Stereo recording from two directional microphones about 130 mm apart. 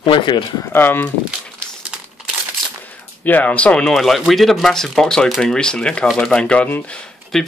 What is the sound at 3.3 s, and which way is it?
Speech, 15° left (ahead or behind).